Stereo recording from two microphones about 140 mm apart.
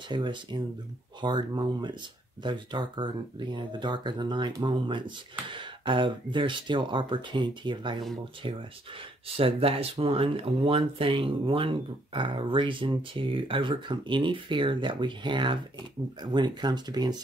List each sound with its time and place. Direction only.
0.1 s speech: 35° right (ahead or behind)